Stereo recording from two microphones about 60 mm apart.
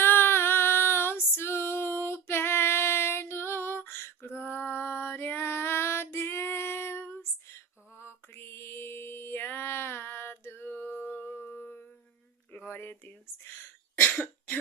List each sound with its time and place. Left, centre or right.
0.0 s female singing: left
11.5 s music: left
12.5 s cough: left